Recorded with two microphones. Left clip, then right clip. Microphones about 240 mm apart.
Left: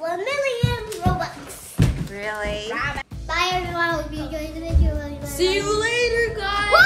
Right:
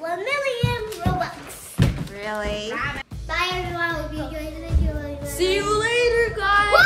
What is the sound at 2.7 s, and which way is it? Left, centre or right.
Music, centre.